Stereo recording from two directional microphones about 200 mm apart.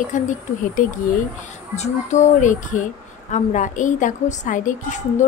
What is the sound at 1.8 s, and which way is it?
A woman's voice, 35° left (ahead or behind).